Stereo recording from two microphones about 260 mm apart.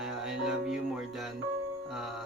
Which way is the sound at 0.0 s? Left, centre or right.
Centre.